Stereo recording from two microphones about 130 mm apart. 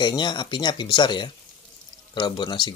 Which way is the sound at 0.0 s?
35° left (ahead or behind).